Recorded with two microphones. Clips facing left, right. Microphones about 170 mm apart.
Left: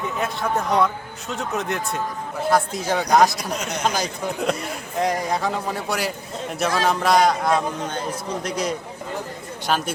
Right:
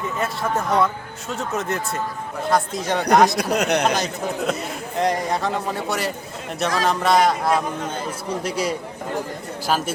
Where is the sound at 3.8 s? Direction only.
Centre (ahead or behind).